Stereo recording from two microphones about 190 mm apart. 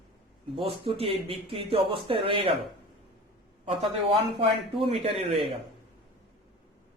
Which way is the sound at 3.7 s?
30° right (ahead or behind).